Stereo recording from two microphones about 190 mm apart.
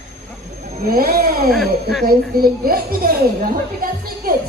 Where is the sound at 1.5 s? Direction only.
Centre (ahead or behind).